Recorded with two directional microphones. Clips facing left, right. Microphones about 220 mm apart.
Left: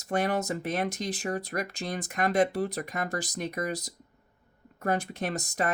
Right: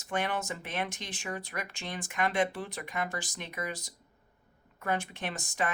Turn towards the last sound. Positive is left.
turn(degrees=40)  # may be behind; listen again after turning